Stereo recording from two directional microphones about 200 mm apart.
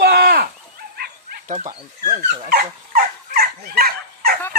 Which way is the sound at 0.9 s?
50° right (ahead or behind).